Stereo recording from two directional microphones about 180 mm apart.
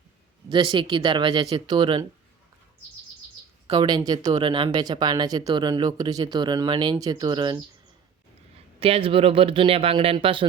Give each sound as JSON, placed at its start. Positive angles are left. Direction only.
{"t": 0.4, "sound": "speech", "side_deg": -25}
{"t": 3.8, "sound": "speech", "side_deg": -25}
{"t": 8.8, "sound": "speech", "side_deg": -30}